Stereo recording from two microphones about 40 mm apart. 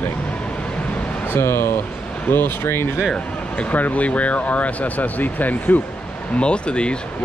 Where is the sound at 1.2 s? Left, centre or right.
Left.